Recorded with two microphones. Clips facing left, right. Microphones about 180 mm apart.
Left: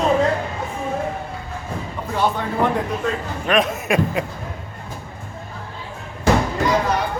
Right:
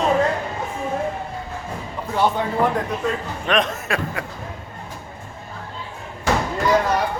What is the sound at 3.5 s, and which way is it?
Speech, 5° left (ahead or behind).